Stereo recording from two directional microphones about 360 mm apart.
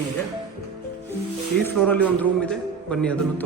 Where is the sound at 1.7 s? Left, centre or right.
Centre.